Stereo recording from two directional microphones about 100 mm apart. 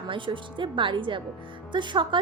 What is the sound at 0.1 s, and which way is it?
A woman's voice, 55° right (ahead or behind).